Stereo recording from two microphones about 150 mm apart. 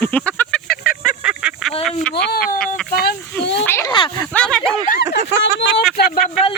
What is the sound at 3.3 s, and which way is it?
Speech, 10° left (ahead or behind).